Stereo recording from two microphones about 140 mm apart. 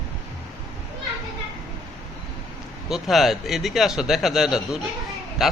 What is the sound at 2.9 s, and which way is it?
A man's voice, centre (ahead or behind).